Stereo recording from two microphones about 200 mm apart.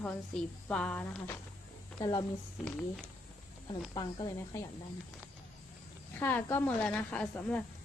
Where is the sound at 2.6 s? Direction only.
5° left (ahead or behind).